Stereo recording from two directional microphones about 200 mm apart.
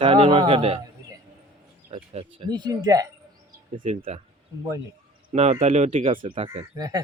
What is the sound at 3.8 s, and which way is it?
Speech, 30° right (ahead or behind).